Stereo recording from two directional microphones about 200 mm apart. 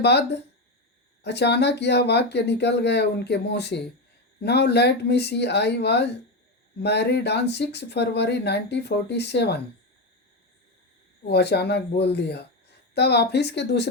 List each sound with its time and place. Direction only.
0.0 s speech: 55° left (ahead or behind)
11.3 s speech: 55° left (ahead or behind)